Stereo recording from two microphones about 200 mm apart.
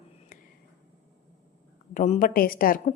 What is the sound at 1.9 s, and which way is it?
Speech, 35° left (ahead or behind).